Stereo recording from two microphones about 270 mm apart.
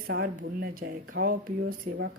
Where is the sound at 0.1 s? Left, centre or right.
Right.